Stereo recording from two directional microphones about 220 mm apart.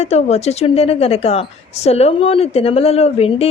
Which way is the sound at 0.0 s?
30° left (ahead or behind).